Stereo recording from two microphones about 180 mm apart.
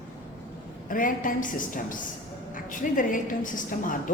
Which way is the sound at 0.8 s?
50° left (ahead or behind).